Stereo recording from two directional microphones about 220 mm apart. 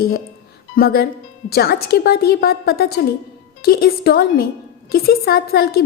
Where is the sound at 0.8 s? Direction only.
45° left (ahead or behind).